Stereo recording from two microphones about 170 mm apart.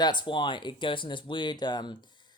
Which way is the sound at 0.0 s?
25° left (ahead or behind).